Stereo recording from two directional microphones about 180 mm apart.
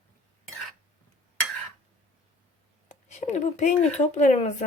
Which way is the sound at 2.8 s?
40° left (ahead or behind).